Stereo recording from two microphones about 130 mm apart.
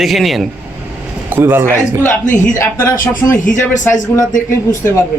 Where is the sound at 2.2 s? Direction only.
75° left (ahead or behind).